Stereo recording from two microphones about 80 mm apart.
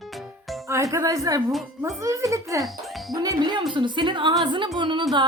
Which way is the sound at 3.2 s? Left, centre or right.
Right.